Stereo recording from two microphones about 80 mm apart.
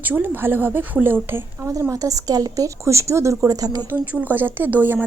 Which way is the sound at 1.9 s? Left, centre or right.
Right.